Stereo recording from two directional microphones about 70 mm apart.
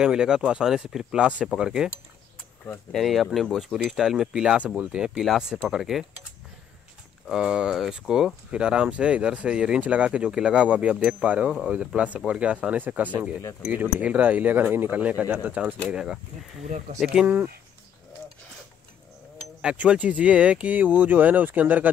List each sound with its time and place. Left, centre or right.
0.0 s speech: centre
2.9 s speech: centre
7.2 s speech: centre
15.9 s speech: centre
19.6 s speech: centre